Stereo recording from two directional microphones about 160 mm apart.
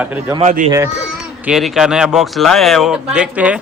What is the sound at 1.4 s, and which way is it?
A woman's voice, centre (ahead or behind).